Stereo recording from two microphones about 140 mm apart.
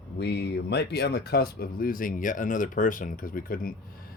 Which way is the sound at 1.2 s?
90° left.